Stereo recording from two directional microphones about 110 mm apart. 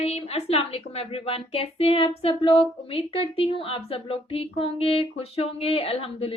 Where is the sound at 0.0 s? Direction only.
70° left (ahead or behind).